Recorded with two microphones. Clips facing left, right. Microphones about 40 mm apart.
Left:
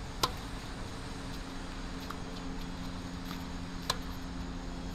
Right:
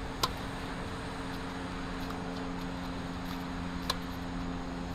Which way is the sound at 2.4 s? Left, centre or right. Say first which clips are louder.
Right 4 dB; centre.